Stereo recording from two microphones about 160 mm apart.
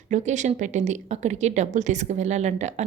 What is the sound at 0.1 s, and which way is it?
A woman's voice, 50° right (ahead or behind).